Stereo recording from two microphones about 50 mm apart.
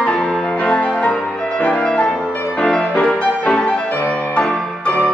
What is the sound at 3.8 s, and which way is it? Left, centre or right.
Music, left.